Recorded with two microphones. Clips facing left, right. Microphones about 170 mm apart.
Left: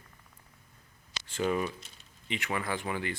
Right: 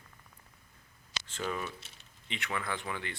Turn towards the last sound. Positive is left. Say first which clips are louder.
# left 4 dB
turn(degrees=10)  # may be behind; listen again after turning